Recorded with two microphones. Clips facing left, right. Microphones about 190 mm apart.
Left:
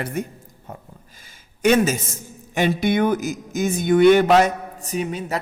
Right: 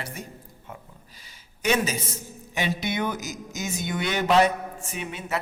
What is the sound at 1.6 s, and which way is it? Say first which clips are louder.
A man's voice: left 8 dB; 50° left (ahead or behind).